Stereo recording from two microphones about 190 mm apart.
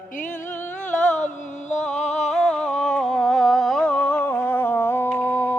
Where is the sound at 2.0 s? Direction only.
35° left (ahead or behind).